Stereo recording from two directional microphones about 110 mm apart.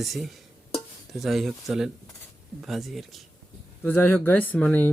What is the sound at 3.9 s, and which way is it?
Speech, 15° left (ahead or behind).